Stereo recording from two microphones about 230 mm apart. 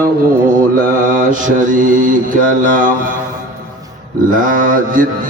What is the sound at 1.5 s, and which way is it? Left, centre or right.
Mantra, right.